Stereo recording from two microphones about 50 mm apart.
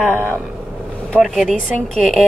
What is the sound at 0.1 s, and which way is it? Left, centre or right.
Speech, right.